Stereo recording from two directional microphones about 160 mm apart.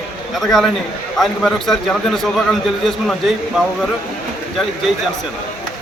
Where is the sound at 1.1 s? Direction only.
Centre (ahead or behind).